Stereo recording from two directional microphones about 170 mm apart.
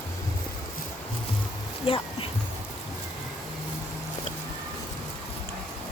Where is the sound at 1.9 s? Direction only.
30° left (ahead or behind).